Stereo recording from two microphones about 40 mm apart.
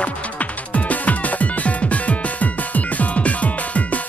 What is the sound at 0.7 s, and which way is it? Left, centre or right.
Music, left.